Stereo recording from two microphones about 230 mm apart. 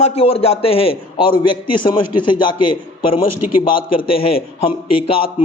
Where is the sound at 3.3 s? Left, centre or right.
Left.